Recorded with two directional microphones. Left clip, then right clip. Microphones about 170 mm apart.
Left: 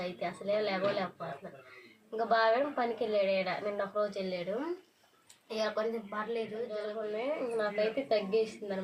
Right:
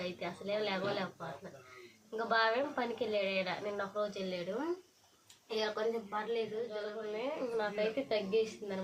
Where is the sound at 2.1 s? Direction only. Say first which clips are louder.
Left 4 dB; 5° right (ahead or behind).